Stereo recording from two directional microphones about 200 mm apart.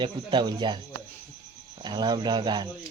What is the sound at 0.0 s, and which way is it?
Speech, 25° right (ahead or behind).